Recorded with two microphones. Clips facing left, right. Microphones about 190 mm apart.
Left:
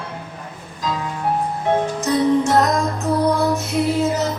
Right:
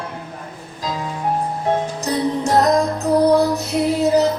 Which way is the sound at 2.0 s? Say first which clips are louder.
Left 6 dB; 35° right (ahead or behind).